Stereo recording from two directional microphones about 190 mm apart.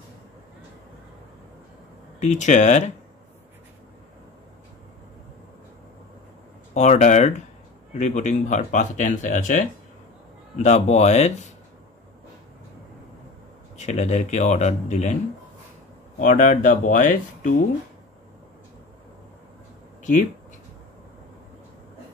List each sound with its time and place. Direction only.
2.1 s speech: 40° left (ahead or behind)
6.7 s speech: 35° left (ahead or behind)
13.7 s speech: 40° left (ahead or behind)
16.2 s speech: 40° left (ahead or behind)
20.0 s speech: 40° left (ahead or behind)